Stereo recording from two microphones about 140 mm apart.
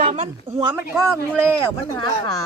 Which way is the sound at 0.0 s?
60° right (ahead or behind).